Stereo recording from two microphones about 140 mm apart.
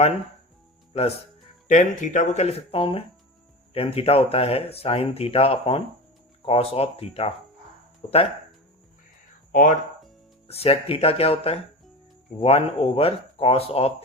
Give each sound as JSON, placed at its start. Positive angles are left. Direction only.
{"t": 1.6, "sound": "speech", "side_deg": 65}
{"t": 9.5, "sound": "speech", "side_deg": 75}
{"t": 10.5, "sound": "speech", "side_deg": 45}